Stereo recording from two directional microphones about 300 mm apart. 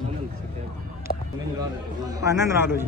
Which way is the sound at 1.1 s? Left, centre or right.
Left.